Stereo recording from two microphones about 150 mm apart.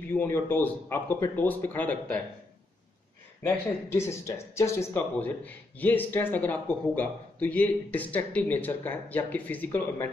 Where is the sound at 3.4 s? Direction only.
15° left (ahead or behind).